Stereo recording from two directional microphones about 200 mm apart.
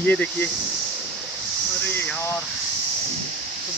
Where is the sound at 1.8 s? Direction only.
5° left (ahead or behind).